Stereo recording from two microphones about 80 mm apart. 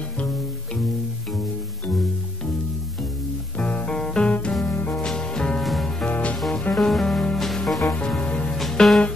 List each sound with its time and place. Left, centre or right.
3.5 s music: centre
4.6 s music: left
5.0 s music: centre
6.0 s music: centre
6.7 s music: centre
8.2 s music: centre
8.5 s music: centre